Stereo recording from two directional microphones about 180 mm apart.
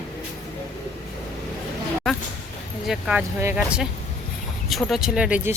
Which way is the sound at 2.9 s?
5° right (ahead or behind).